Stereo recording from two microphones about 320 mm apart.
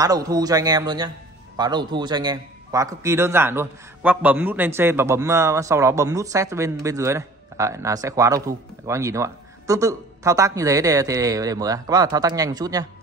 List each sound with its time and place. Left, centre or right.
0.0 s a man's voice: centre